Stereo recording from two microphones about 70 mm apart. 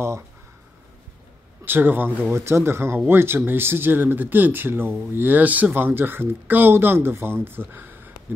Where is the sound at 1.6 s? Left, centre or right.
Right.